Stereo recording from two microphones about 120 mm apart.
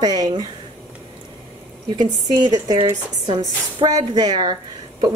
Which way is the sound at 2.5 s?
30° right (ahead or behind).